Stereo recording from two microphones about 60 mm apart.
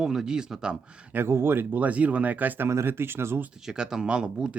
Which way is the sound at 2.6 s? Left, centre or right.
Right.